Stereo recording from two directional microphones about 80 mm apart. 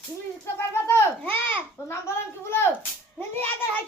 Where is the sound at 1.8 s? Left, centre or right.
Left.